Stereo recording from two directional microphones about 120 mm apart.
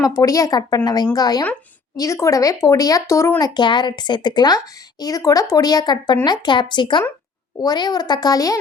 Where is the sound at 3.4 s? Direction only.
40° left (ahead or behind).